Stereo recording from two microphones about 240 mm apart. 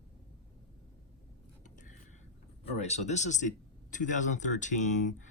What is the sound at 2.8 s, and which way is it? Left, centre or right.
Speech, left.